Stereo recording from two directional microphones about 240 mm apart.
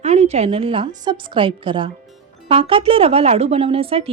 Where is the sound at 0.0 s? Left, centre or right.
Right.